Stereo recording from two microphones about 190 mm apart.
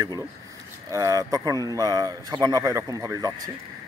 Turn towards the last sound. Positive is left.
turn(degrees=-15)  # may be behind; listen again after turning